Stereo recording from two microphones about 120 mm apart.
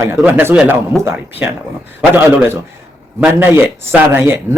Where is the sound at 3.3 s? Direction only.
20° right (ahead or behind).